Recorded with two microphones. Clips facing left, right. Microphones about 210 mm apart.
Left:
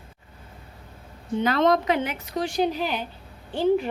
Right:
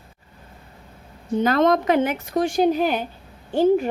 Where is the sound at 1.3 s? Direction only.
45° right (ahead or behind).